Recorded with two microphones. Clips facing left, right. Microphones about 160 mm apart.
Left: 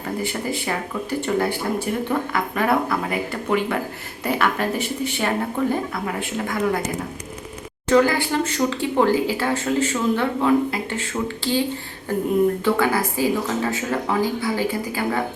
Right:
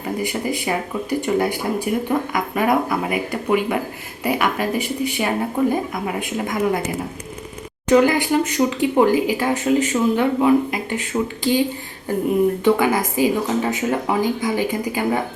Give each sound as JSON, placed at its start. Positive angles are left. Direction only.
{"t": 0.0, "sound": "speech", "side_deg": -15}
{"t": 7.9, "sound": "speech", "side_deg": -15}
{"t": 12.6, "sound": "speech", "side_deg": -15}